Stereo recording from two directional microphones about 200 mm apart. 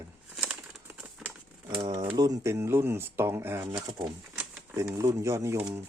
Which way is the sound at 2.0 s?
20° right (ahead or behind).